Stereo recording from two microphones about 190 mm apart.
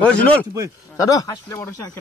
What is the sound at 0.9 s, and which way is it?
Speech, 20° left (ahead or behind).